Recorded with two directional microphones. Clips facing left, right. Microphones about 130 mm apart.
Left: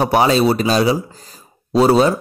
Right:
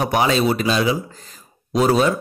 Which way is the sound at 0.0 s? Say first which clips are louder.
Left 4 dB; 35° left (ahead or behind).